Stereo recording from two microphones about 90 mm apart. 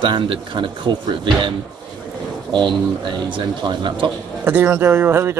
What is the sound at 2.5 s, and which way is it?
Speech, 60° right (ahead or behind).